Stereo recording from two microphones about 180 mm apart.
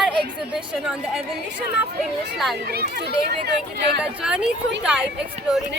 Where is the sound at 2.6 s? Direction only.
60° right (ahead or behind).